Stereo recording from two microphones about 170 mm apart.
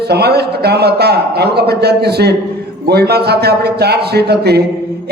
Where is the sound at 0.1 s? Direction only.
70° right (ahead or behind).